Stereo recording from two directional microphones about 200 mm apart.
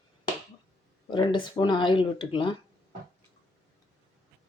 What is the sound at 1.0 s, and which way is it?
Speech, 25° left (ahead or behind).